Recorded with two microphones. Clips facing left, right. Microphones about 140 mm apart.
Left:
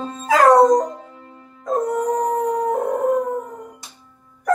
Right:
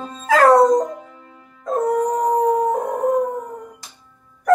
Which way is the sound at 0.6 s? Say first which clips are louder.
Left 1 dB; 25° left (ahead or behind).